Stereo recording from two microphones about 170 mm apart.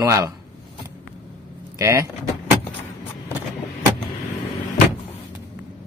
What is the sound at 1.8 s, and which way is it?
Speech, 15° right (ahead or behind).